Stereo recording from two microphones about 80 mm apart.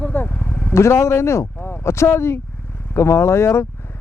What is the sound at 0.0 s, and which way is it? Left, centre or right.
Vehicle, left.